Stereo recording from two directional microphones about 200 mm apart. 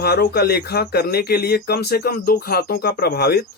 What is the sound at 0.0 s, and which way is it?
Speech, 50° left (ahead or behind).